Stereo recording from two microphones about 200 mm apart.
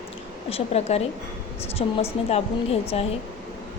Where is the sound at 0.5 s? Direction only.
30° left (ahead or behind).